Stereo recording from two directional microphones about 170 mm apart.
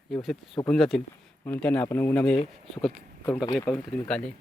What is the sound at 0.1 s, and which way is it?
Speech, centre (ahead or behind).